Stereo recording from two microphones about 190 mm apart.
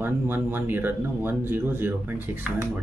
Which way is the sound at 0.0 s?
10° right (ahead or behind).